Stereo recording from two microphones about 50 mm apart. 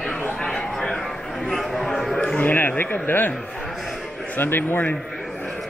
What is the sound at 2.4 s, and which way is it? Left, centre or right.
Speech, left.